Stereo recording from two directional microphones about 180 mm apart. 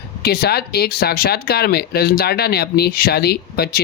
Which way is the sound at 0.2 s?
60° left (ahead or behind).